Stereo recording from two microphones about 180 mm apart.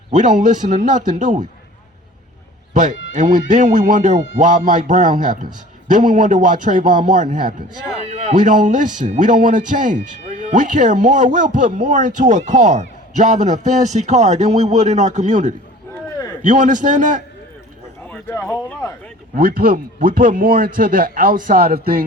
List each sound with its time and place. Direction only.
0.1 s a man's voice: 45° right (ahead or behind)
2.7 s a man's voice: 45° right (ahead or behind)
18.0 s speech: 10° left (ahead or behind)
19.4 s a man's voice: 50° right (ahead or behind)